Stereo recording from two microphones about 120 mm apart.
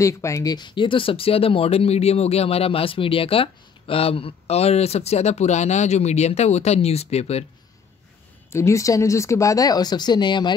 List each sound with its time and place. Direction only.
0.0 s speech: 25° left (ahead or behind); by 7.4 s 60° left (ahead or behind)
8.5 s speech: 25° left (ahead or behind); by 10.5 s 40° left (ahead or behind)